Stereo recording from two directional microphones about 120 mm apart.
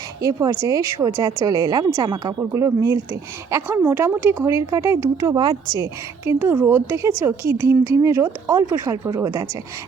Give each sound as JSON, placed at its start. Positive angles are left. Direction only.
{"t": 0.2, "sound": "a woman's voice", "side_deg": -30}
{"t": 5.7, "sound": "a woman's voice", "side_deg": -25}